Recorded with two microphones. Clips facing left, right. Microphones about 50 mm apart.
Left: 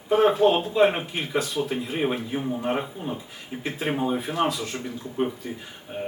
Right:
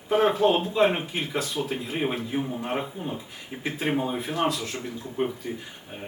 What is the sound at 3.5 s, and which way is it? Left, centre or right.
Speech, centre.